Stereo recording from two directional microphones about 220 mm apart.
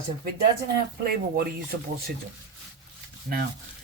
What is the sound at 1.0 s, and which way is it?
Speech, 45° right (ahead or behind).